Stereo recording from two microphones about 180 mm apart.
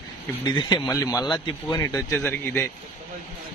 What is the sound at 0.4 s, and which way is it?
Speech, 25° left (ahead or behind).